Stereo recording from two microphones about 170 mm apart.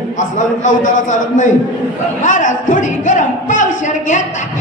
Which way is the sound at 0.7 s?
45° left (ahead or behind).